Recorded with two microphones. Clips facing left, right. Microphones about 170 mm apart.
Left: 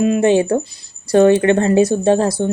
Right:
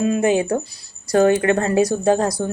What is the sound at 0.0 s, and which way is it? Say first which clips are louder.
Speech: left 4 dB; 30° left (ahead or behind).